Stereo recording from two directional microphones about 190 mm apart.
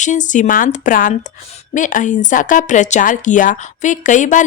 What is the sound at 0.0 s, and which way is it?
Speech, 40° left (ahead or behind).